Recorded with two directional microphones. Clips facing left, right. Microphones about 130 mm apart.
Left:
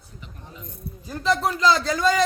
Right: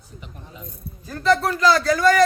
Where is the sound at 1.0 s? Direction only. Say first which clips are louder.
Right 3 dB; 15° left (ahead or behind).